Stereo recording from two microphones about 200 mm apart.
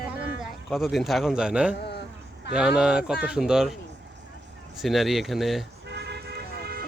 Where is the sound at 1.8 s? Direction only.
55° left (ahead or behind).